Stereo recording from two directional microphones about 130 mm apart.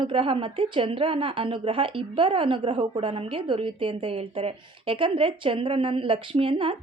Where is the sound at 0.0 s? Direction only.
45° right (ahead or behind).